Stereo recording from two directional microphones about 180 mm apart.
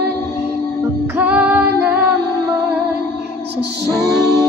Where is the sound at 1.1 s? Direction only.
10° right (ahead or behind).